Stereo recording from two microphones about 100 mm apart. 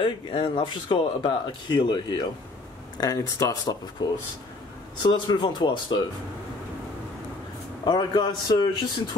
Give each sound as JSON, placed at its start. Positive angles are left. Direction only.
{"t": 0.0, "sound": "speech", "side_deg": 55}
{"t": 3.0, "sound": "speech", "side_deg": 35}
{"t": 7.8, "sound": "speech", "side_deg": 50}